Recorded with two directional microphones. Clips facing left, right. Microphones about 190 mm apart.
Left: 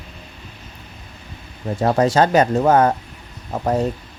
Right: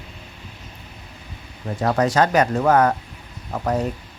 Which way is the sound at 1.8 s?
30° left (ahead or behind).